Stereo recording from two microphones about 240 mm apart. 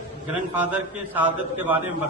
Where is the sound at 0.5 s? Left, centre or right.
Centre.